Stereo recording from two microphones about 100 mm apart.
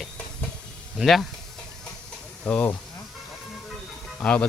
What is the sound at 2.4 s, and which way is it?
Speech, 15° left (ahead or behind).